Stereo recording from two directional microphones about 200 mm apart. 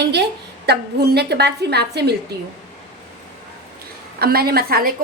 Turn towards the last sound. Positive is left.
turn(degrees=-50)  # may be behind; listen again after turning